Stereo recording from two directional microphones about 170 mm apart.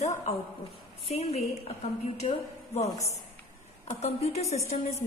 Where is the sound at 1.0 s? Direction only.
35° left (ahead or behind).